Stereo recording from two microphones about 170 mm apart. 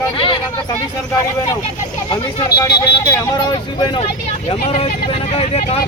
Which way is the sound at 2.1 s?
25° left (ahead or behind).